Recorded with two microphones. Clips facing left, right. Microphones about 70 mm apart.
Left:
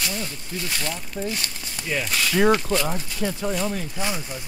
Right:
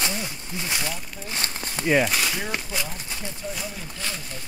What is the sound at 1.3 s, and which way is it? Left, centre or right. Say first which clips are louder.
Speech: even; right.